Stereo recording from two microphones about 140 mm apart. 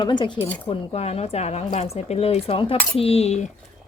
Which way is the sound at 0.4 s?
15° left (ahead or behind).